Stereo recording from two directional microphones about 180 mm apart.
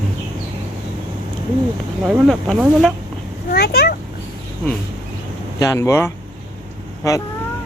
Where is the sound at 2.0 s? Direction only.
5° right (ahead or behind).